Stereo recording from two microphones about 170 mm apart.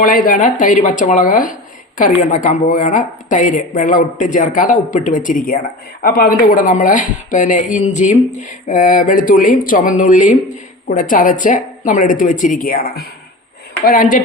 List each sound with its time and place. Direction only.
0.0 s speech: 55° left (ahead or behind)